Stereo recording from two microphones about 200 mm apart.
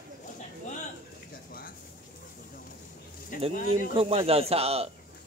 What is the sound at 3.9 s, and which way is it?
Speech, 30° right (ahead or behind).